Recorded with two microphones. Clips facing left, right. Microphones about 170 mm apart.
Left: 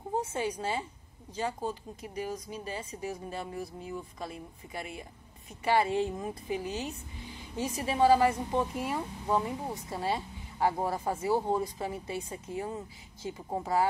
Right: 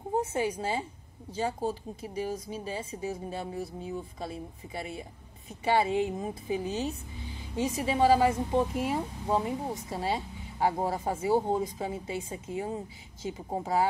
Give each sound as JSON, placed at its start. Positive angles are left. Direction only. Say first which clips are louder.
{"t": 0.6, "sound": "speech", "louder": "right 2 dB", "side_deg": -25}
{"t": 5.6, "sound": "speech", "louder": "right 1 dB", "side_deg": -20}